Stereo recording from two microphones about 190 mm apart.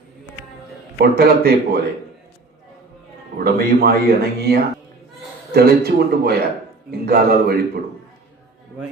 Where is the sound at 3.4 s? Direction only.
55° right (ahead or behind).